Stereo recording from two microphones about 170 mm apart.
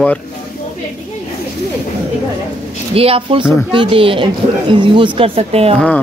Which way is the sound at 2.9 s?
35° right (ahead or behind).